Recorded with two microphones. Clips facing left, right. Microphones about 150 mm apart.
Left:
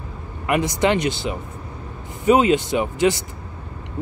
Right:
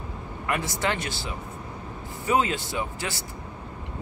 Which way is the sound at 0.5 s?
20° left (ahead or behind).